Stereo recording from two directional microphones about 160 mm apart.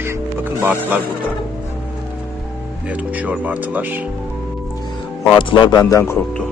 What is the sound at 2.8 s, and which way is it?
A man's voice, 10° right (ahead or behind).